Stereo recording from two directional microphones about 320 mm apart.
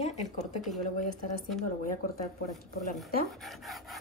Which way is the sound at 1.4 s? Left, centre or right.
Centre.